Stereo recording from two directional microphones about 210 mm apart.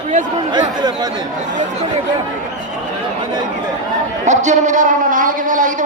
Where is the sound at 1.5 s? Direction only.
35° right (ahead or behind).